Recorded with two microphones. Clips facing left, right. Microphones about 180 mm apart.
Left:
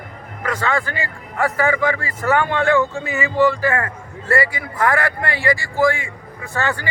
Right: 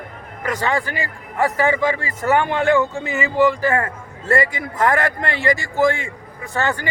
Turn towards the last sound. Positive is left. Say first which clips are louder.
# right 1 dB
turn(degrees=-20)  # may be behind; listen again after turning